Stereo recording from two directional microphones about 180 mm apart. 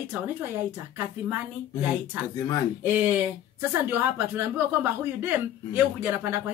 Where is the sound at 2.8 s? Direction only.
10° right (ahead or behind).